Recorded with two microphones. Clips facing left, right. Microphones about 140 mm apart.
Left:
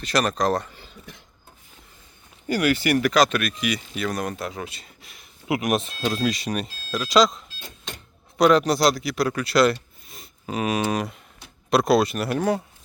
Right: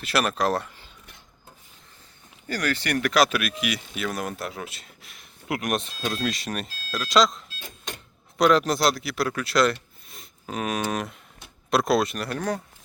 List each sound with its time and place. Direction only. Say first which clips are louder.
0.0 s speech: left 2 dB; 5° right (ahead or behind)
2.5 s speech: left 6 dB; 10° left (ahead or behind)